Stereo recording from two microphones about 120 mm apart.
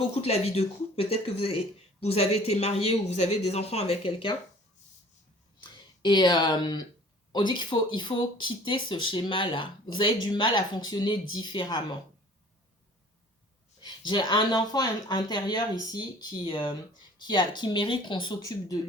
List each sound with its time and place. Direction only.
0.2 s speech: 60° left (ahead or behind)
5.5 s speech: 40° left (ahead or behind)
13.8 s speech: 40° left (ahead or behind)